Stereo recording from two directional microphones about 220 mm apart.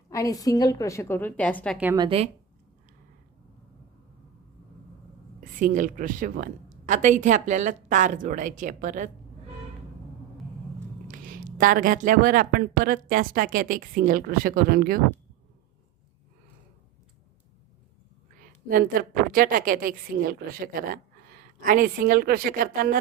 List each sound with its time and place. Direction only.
0.1 s a woman's voice: 15° left (ahead or behind)
1.8 s a woman's voice: 10° right (ahead or behind)
2.0 s speech: 25° right (ahead or behind)
5.4 s speech: 35° right (ahead or behind)
11.1 s speech: 40° right (ahead or behind)
18.3 s speech: 40° right (ahead or behind)